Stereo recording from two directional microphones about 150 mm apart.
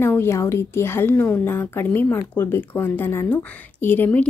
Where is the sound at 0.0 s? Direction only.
15° left (ahead or behind).